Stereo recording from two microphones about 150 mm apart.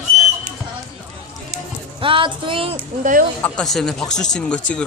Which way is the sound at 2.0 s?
35° right (ahead or behind).